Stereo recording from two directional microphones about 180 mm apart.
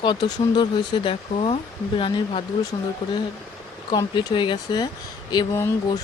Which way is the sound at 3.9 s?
20° left (ahead or behind).